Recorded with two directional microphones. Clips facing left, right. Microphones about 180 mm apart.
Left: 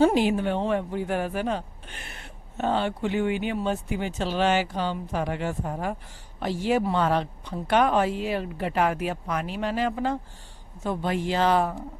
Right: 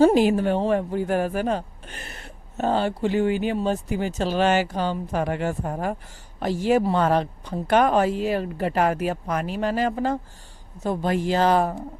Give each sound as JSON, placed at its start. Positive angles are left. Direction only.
{"t": 0.0, "sound": "a woman's voice", "side_deg": -40}